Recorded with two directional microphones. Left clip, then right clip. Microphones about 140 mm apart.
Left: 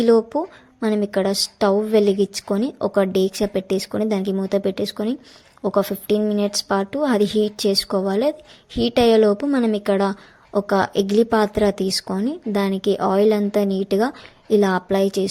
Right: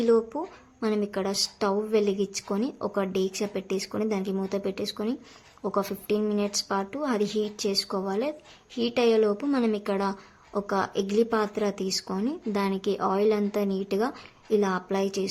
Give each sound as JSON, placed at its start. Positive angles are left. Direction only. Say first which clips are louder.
{"t": 0.0, "sound": "speech", "louder": "left 7 dB", "side_deg": 35}